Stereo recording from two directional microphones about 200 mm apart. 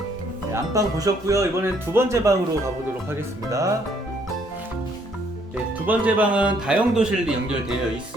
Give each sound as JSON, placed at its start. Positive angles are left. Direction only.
{"t": 0.5, "sound": "speech", "side_deg": -15}
{"t": 5.8, "sound": "a man's voice", "side_deg": -10}